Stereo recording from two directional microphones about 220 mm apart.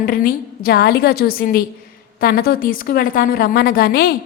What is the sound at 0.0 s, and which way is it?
A woman's voice, 40° left (ahead or behind).